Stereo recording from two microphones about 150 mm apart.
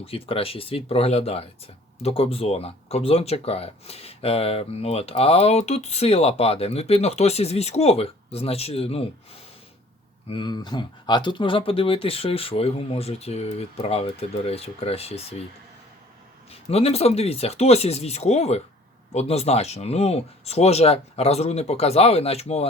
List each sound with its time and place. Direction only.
0.0 s speech: 40° left (ahead or behind)
10.2 s speech: 30° left (ahead or behind)
16.5 s speech: 45° left (ahead or behind)